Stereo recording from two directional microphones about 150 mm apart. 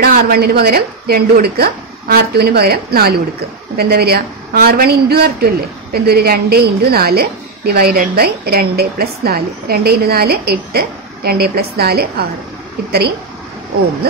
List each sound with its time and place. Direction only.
0.0 s a woman's voice: 90° right